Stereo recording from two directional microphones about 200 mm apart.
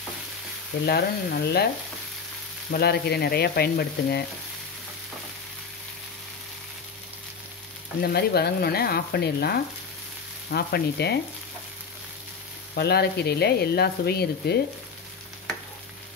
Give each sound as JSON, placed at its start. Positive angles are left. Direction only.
{"t": 0.8, "sound": "speech", "side_deg": 50}
{"t": 2.7, "sound": "speech", "side_deg": 55}
{"t": 8.0, "sound": "speech", "side_deg": 50}
{"t": 12.7, "sound": "speech", "side_deg": 55}